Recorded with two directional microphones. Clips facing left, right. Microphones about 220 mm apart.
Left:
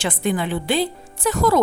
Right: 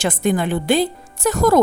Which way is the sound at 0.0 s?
45° right (ahead or behind).